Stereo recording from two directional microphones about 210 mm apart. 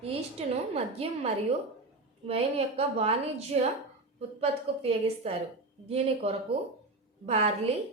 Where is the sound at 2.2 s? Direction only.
30° right (ahead or behind).